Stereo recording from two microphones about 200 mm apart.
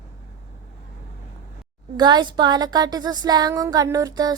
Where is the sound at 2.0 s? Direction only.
20° right (ahead or behind).